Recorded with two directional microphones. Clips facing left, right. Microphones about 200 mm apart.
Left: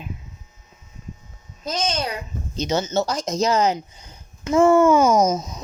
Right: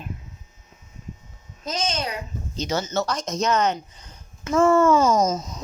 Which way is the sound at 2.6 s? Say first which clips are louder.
Left 3 dB; 20° left (ahead or behind).